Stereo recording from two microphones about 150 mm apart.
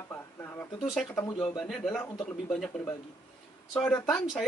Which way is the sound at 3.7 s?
10° left (ahead or behind).